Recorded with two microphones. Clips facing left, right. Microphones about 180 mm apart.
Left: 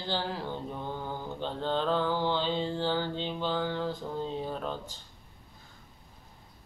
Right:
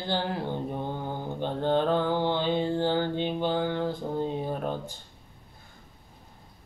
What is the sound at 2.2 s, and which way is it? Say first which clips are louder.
Mantra: right 3 dB; 55° right (ahead or behind).